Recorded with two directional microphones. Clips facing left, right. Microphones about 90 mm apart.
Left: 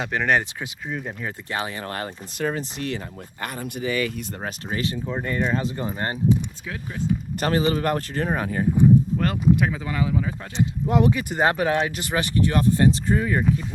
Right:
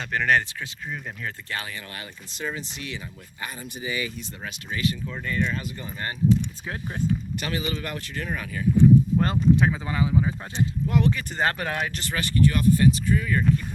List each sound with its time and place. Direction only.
0.0 s speech: 5° left (ahead or behind)
1.5 s speech: 25° left (ahead or behind)
1.7 s speech: 45° left (ahead or behind)
3.4 s speech: 65° left (ahead or behind)
4.4 s speech: 35° left (ahead or behind)
7.3 s speech: 40° left (ahead or behind)
9.1 s speech: 25° right (ahead or behind)
10.6 s speech: 20° left (ahead or behind)
11.9 s speech: 15° left (ahead or behind)